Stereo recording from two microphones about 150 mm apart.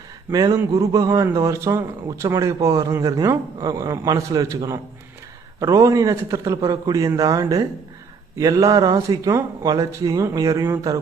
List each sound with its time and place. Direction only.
0.3 s a man's voice: 25° right (ahead or behind)